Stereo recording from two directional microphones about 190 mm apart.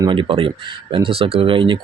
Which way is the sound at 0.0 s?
25° right (ahead or behind).